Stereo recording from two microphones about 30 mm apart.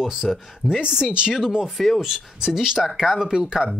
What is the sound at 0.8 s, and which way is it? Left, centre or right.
Speech, right.